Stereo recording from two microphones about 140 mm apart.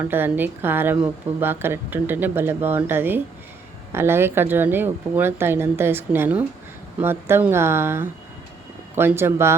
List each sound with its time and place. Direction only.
0.0 s speech: 15° right (ahead or behind)